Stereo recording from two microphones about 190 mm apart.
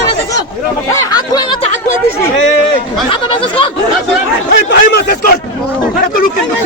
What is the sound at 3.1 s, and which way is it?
Speech, 25° left (ahead or behind).